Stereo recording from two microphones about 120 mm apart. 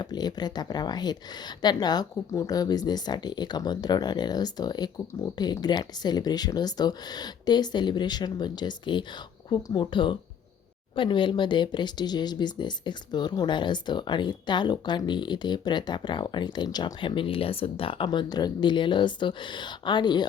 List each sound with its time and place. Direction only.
0.0 s speech: 35° left (ahead or behind)